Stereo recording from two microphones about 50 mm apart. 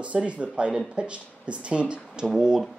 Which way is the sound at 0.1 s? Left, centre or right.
Right.